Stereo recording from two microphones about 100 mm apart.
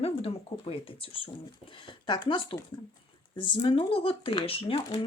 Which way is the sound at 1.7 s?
55° left (ahead or behind).